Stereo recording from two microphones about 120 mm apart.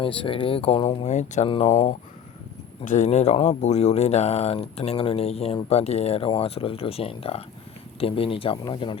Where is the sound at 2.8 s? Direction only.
90° left.